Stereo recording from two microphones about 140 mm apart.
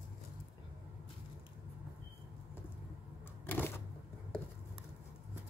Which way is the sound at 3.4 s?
15° left (ahead or behind).